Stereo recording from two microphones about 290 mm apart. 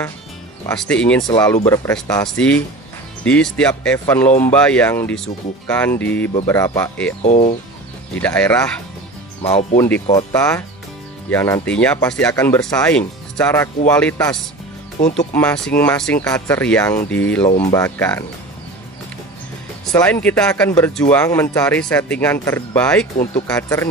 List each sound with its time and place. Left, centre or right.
0.7 s speech: centre
7.2 s speech: left
8.2 s speech: centre
9.4 s speech: left
9.8 s speech: centre
15.0 s speech: left
15.3 s speech: centre
19.9 s speech: centre